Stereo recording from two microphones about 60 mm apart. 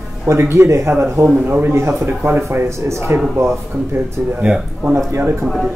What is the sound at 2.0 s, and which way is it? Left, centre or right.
Speech, right.